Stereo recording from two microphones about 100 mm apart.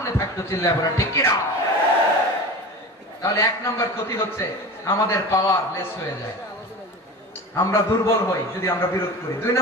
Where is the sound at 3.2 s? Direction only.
30° left (ahead or behind).